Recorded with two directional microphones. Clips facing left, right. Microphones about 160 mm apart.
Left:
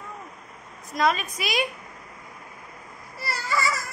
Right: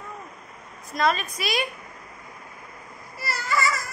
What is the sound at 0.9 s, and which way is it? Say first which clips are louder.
Speech: even; 10° left (ahead or behind).